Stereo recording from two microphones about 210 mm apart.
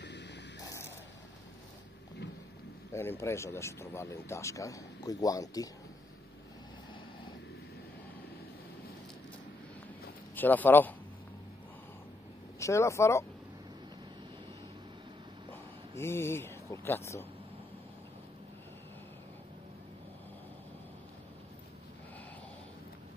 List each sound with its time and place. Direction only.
0.0 s static: 55° left (ahead or behind)
0.7 s a sound: 10° left (ahead or behind)
2.9 s speech: 10° left (ahead or behind)
10.3 s speech: 10° left (ahead or behind)
12.5 s speech: 15° left (ahead or behind)
16.0 s speech: 10° left (ahead or behind)